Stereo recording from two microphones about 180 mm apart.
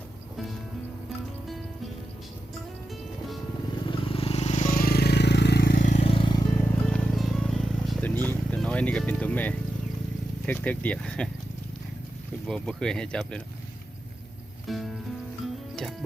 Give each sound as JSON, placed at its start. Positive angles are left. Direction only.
{"t": 3.8, "sound": "vehicle", "side_deg": 30}
{"t": 6.8, "sound": "music", "side_deg": 5}
{"t": 8.2, "sound": "vehicle", "side_deg": 10}
{"t": 10.4, "sound": "speech", "side_deg": 10}
{"t": 12.5, "sound": "speech", "side_deg": 5}
{"t": 14.7, "sound": "speech", "side_deg": 0}
{"t": 15.7, "sound": "music", "side_deg": 0}